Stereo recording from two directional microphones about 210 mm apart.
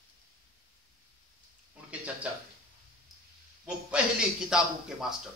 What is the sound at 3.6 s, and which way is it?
Speech, 5° right (ahead or behind).